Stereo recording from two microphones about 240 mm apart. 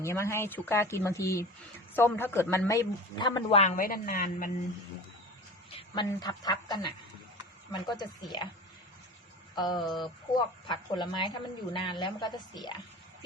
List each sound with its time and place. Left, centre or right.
0.0 s a woman's voice: centre; by 4.5 s left
5.7 s a woman's voice: centre
9.6 s a woman's voice: centre
9.8 s speech: centre
10.7 s speech: centre